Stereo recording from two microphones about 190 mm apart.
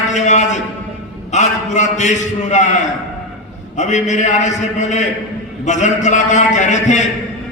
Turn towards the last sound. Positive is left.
turn(degrees=40)  # may be behind; listen again after turning